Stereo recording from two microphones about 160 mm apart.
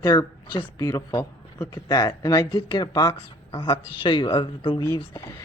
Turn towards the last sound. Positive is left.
turn(degrees=20)  # may be behind; listen again after turning